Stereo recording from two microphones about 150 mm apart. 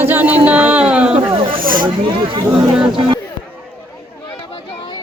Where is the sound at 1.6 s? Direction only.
70° right (ahead or behind).